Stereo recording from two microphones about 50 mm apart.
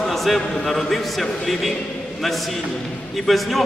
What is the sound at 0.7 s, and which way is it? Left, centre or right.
A man's voice, centre.